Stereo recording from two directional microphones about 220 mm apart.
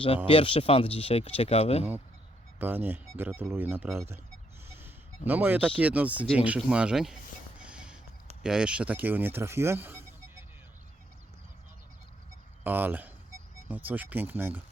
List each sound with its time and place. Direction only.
0.3 s speech: 25° left (ahead or behind)
2.6 s speech: 10° right (ahead or behind)
4.8 s a sound: 10° right (ahead or behind)
5.8 s speech: 5° right (ahead or behind)
7.6 s music: 5° right (ahead or behind)
8.4 s speech: 5° right (ahead or behind)
12.6 s speech: 10° right (ahead or behind)